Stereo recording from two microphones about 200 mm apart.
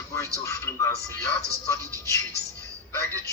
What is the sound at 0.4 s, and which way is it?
Speech, 15° left (ahead or behind).